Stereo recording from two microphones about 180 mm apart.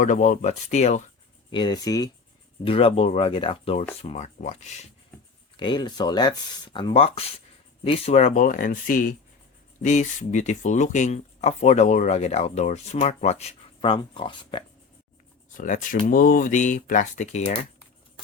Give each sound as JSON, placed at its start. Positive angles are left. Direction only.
{"t": 0.0, "sound": "speech", "side_deg": 45}
{"t": 1.5, "sound": "speech", "side_deg": 25}
{"t": 2.6, "sound": "speech", "side_deg": 30}
{"t": 5.5, "sound": "speech", "side_deg": 25}
{"t": 15.5, "sound": "speech", "side_deg": 45}